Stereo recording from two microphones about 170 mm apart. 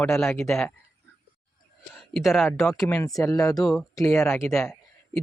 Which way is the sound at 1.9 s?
Centre (ahead or behind).